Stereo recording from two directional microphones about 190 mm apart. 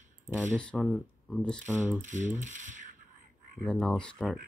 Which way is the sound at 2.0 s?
40° right (ahead or behind).